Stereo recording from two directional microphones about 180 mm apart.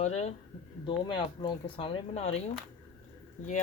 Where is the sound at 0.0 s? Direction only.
35° left (ahead or behind).